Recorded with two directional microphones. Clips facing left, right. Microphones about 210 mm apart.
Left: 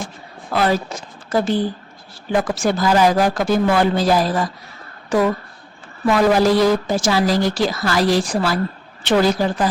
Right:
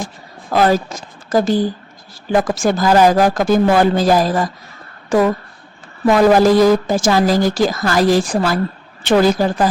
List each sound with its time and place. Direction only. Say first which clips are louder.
0.5 s a woman's voice: right 4 dB; 45° right (ahead or behind)
6.1 s a woman's voice: right 4 dB; 45° right (ahead or behind)